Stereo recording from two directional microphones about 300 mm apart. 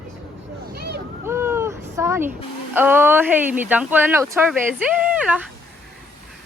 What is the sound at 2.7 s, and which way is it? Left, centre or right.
Speech, centre.